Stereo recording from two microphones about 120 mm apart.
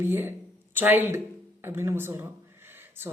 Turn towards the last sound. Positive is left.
turn(degrees=-20)  # may be behind; listen again after turning